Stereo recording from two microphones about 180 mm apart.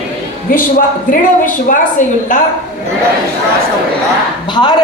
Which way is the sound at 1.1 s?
50° left (ahead or behind).